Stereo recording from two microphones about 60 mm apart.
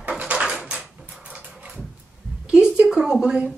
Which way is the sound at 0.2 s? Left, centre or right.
Centre.